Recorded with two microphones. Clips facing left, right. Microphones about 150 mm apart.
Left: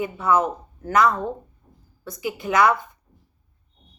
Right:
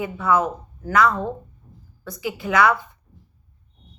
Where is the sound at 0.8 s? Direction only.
20° left (ahead or behind).